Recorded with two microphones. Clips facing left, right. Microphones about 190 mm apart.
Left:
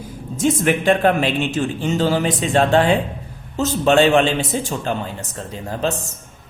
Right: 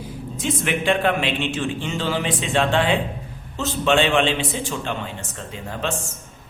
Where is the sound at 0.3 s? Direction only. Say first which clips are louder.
Left 7 dB; 45° left (ahead or behind).